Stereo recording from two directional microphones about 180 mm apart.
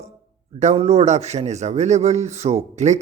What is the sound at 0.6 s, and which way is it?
A man's voice, 35° right (ahead or behind).